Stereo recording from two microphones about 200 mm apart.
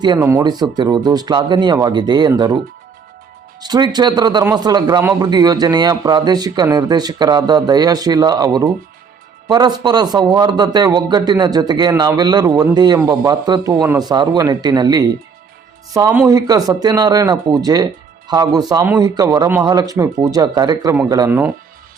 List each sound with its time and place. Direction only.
0.0 s a man's voice: 20° right (ahead or behind)
3.6 s a man's voice: 20° right (ahead or behind)